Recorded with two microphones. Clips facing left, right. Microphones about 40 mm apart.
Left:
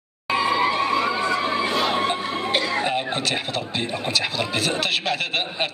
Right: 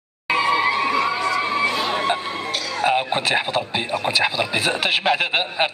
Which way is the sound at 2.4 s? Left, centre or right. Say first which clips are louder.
Left 4 dB; left.